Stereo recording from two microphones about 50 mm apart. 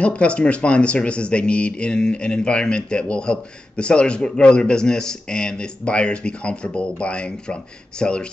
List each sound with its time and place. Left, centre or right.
0.0 s speech: left